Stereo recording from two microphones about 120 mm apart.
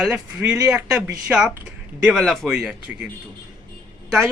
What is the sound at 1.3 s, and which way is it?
Speech, 5° right (ahead or behind).